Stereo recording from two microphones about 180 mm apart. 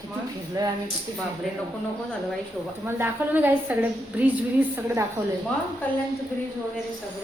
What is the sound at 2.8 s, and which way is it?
A woman's voice, 10° right (ahead or behind).